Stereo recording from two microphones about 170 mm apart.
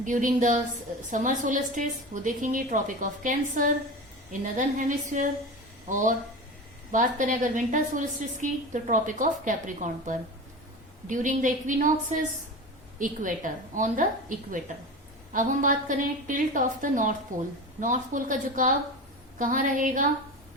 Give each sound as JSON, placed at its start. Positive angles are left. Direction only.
{"t": 0.0, "sound": "a woman's voice", "side_deg": -50}